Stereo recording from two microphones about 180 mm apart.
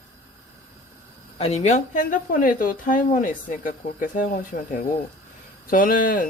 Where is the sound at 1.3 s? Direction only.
35° left (ahead or behind).